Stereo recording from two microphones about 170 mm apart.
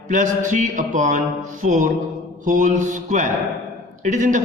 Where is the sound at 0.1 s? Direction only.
45° right (ahead or behind).